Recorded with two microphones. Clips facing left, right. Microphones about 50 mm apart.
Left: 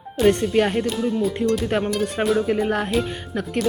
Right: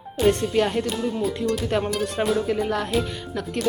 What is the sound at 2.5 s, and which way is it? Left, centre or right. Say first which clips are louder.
Speech: left 3 dB; left.